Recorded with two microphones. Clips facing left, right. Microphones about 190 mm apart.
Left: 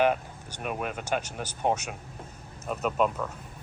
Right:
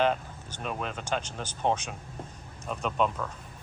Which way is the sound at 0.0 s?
10° left (ahead or behind).